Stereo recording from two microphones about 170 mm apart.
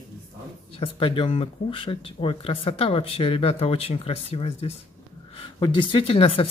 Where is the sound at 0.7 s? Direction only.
30° left (ahead or behind).